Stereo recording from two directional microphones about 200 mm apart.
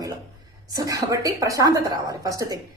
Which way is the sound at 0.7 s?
15° right (ahead or behind).